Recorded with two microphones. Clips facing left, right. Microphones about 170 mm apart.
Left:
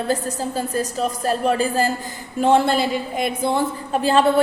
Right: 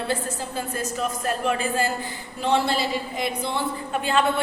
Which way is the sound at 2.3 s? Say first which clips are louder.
Left 6 dB; 50° left (ahead or behind).